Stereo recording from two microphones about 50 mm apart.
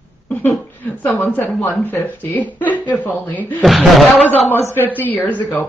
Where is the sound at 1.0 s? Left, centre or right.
Left.